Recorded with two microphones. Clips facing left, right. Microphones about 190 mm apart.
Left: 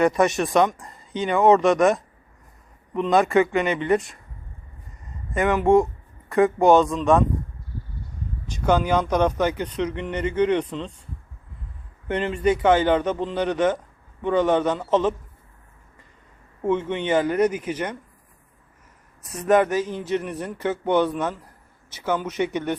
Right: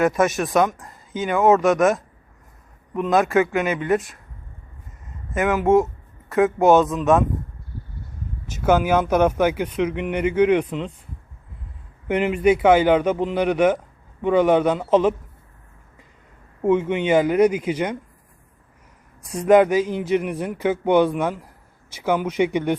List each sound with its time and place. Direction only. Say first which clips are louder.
0.0 s speech: even; centre (ahead or behind)
5.3 s speech: even; 5° right (ahead or behind)
8.4 s speech: right 2 dB; 5° right (ahead or behind)
12.0 s speech: right 4 dB; 10° right (ahead or behind)
16.6 s speech: right 4 dB; 10° right (ahead or behind)
19.3 s speech: right 4 dB; 10° right (ahead or behind)